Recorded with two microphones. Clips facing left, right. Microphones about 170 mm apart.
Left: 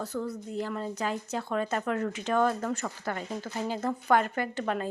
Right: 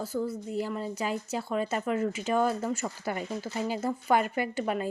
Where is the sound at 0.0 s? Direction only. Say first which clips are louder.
Right 2 dB; 5° right (ahead or behind).